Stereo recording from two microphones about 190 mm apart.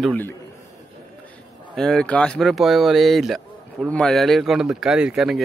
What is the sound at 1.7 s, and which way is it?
A man's voice, centre (ahead or behind).